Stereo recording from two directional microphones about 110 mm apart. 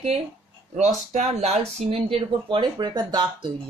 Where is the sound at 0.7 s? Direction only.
90° right.